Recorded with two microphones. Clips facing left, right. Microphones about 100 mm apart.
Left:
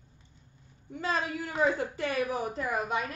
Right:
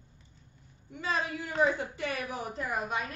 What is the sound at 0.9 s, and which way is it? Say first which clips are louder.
A man's voice: left 2 dB; 40° left (ahead or behind).